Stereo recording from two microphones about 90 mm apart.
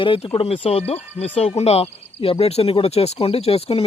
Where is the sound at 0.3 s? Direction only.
90° left.